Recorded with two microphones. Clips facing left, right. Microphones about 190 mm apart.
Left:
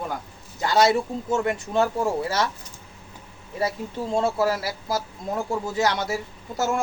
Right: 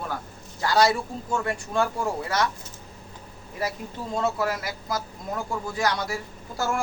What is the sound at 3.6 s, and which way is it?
A man's voice, 25° left (ahead or behind).